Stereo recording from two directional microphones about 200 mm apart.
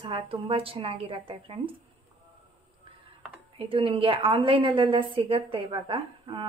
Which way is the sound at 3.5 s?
25° right (ahead or behind).